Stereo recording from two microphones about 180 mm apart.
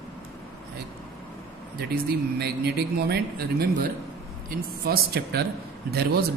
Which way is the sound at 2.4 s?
65° right (ahead or behind).